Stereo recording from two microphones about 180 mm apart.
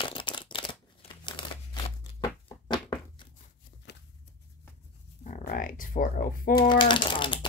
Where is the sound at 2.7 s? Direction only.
25° left (ahead or behind).